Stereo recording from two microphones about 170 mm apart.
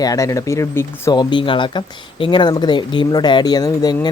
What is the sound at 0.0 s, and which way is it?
Speech, 20° left (ahead or behind).